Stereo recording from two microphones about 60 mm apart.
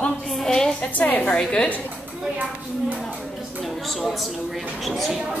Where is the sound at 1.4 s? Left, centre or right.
Centre.